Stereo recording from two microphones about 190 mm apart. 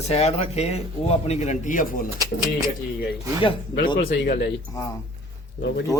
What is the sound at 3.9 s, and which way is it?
Speech, 50° left (ahead or behind).